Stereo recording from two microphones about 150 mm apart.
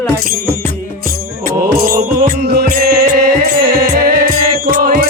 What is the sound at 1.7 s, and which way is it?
Music, 70° right (ahead or behind).